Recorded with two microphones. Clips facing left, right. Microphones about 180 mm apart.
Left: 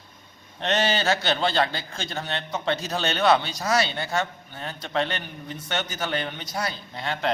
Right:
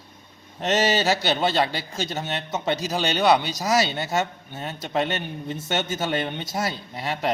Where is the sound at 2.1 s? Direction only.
20° right (ahead or behind).